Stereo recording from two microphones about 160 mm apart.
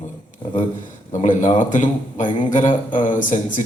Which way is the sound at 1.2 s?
50° left (ahead or behind).